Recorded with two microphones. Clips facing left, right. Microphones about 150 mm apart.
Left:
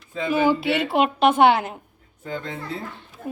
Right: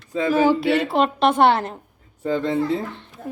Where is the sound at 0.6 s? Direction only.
Centre (ahead or behind).